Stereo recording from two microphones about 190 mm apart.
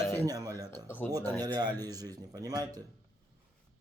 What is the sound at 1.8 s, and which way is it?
Speech, 20° right (ahead or behind).